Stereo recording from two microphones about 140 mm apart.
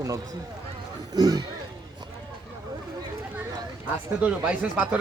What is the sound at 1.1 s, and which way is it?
Speech, 30° right (ahead or behind).